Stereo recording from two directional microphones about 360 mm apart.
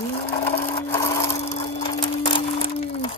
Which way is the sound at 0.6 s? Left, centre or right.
Centre.